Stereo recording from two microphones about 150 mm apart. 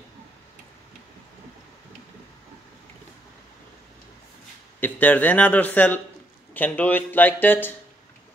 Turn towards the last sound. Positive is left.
turn(degrees=15)  # may be behind; listen again after turning